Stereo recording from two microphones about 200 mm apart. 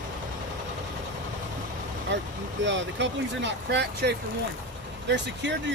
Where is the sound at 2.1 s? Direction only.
65° right (ahead or behind).